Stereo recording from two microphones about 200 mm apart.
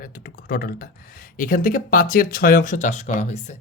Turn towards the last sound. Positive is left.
turn(degrees=35)  # may be behind; listen again after turning